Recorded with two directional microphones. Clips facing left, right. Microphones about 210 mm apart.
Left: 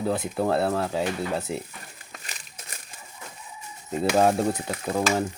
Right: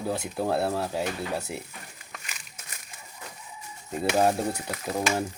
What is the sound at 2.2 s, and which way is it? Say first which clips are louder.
Crumpling: left 3 dB; 35° left (ahead or behind).